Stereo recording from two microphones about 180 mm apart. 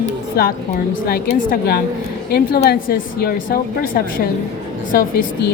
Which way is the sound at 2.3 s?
60° left (ahead or behind).